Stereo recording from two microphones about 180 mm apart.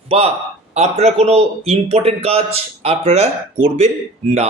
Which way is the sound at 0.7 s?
35° right (ahead or behind).